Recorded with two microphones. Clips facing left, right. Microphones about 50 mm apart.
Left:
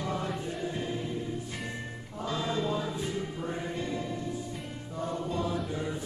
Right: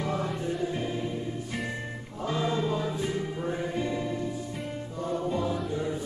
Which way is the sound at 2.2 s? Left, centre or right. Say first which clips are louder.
Right 3 dB; centre.